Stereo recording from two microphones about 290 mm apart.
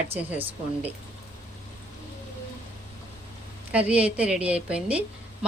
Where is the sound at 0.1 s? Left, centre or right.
Centre.